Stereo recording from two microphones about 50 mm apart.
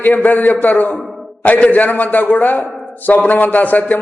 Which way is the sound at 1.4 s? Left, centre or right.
Left.